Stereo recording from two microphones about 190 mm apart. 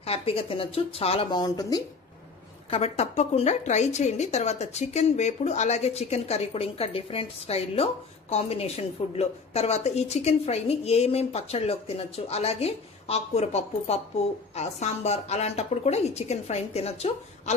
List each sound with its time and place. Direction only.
0.0 s speech: 30° left (ahead or behind)
2.6 s a woman's voice: 30° left (ahead or behind)